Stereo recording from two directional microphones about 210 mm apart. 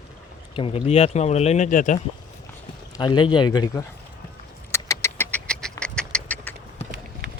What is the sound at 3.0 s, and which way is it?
Speech, 20° left (ahead or behind).